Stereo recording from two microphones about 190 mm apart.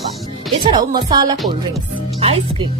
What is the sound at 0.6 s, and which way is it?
Speech, 25° right (ahead or behind).